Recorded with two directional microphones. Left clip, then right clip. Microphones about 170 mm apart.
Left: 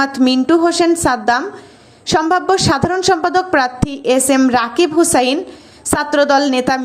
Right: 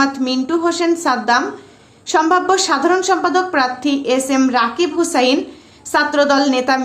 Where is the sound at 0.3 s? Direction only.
35° left (ahead or behind).